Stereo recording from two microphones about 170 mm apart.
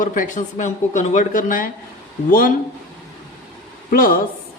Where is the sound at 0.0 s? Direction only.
50° left (ahead or behind).